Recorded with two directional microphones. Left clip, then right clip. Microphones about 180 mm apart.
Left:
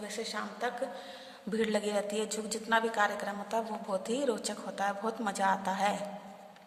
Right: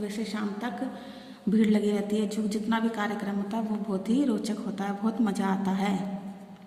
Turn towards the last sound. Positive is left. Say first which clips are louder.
# left 1 dB
turn(degrees=30)  # may be behind; listen again after turning